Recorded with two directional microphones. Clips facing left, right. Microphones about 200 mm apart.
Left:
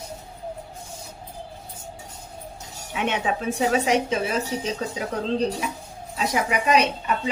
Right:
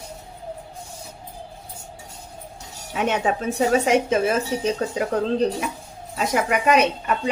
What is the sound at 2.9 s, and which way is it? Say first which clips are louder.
A woman's voice: right 3 dB; 45° right (ahead or behind).